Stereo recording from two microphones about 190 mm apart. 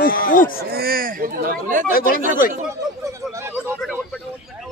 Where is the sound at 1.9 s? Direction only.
50° left (ahead or behind).